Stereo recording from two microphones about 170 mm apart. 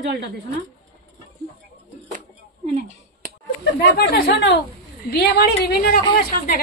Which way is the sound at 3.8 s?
80° left.